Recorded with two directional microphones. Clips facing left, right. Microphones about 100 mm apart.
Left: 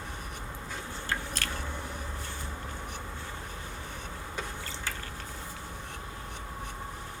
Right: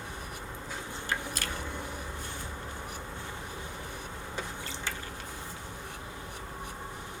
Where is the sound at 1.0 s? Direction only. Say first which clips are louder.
Even; 15° right (ahead or behind).